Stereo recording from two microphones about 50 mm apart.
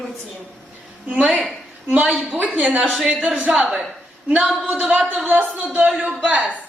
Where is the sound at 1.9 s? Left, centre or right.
Right.